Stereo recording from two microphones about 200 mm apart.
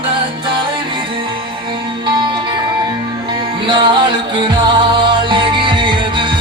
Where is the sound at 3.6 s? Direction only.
25° right (ahead or behind).